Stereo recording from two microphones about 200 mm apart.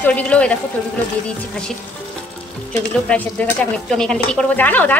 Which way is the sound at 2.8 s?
5° left (ahead or behind).